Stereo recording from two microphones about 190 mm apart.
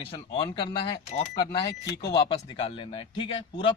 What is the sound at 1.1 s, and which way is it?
Speech, 35° left (ahead or behind).